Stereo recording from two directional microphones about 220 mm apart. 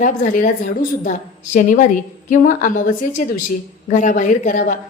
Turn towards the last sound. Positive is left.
turn(degrees=35)  # may be behind; listen again after turning